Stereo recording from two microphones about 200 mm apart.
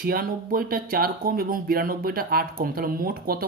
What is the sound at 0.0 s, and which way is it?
Speech, 45° right (ahead or behind).